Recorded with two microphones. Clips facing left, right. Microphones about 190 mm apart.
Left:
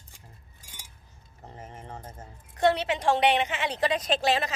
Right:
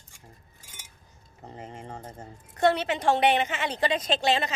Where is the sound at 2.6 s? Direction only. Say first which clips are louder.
Even; centre (ahead or behind).